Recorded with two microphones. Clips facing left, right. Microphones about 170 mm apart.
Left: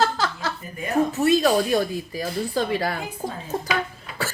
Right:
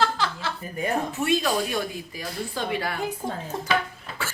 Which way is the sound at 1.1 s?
40° left (ahead or behind).